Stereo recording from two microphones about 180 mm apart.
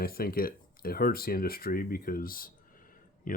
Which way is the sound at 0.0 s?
55° left (ahead or behind).